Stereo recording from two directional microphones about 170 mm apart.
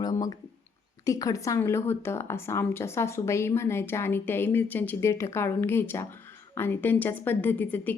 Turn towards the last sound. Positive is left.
turn(degrees=10)  # may be behind; listen again after turning